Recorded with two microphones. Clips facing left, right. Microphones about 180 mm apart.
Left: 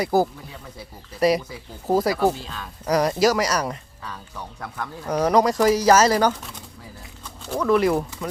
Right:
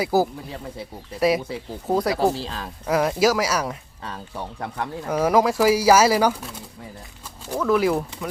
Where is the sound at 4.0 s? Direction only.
30° right (ahead or behind).